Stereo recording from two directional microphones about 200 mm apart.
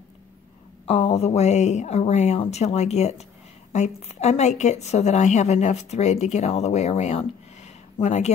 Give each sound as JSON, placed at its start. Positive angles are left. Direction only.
{"t": 0.8, "sound": "a woman's voice", "side_deg": 30}